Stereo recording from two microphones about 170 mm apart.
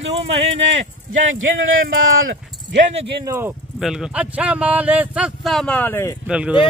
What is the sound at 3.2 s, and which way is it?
Speech, 15° right (ahead or behind).